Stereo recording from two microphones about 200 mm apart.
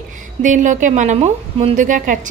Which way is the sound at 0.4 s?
40° right (ahead or behind).